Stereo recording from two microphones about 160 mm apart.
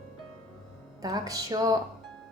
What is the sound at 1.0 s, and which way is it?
Speech, 25° right (ahead or behind).